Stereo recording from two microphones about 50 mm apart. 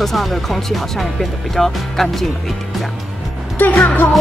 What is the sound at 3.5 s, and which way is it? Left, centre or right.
Speech, left.